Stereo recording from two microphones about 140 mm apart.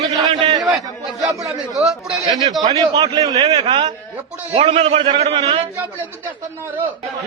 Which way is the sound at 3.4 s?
45° right (ahead or behind).